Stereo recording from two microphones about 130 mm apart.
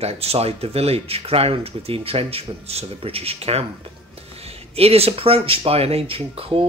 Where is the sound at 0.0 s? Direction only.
50° right (ahead or behind).